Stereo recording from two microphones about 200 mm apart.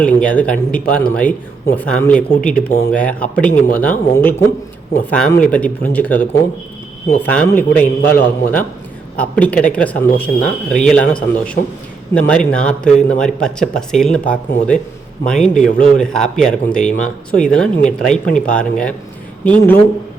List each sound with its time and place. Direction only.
0.0 s speech: 5° left (ahead or behind)
18.0 s speech: 5° left (ahead or behind)